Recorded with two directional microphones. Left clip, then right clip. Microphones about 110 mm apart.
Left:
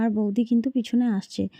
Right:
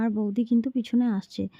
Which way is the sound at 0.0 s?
30° left (ahead or behind).